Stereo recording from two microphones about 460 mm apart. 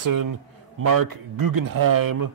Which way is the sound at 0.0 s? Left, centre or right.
Right.